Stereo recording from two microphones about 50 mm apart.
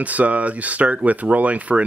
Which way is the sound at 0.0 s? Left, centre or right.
Right.